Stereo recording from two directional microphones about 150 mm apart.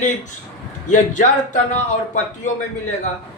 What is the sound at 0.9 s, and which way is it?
Speech, 55° left (ahead or behind).